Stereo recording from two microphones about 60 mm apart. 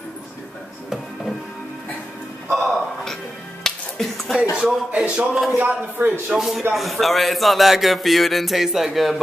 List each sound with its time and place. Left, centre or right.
2.5 s music: centre
5.0 s speech: centre
5.3 s music: centre
5.6 s speech: right
6.2 s speech: centre
6.7 s music: centre